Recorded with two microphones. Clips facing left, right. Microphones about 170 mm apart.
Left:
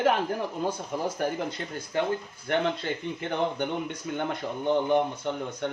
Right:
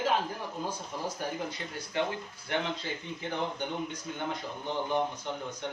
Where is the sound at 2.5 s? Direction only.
60° left (ahead or behind).